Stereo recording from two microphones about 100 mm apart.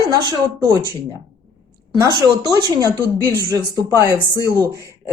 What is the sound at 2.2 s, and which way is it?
Speech, 40° right (ahead or behind).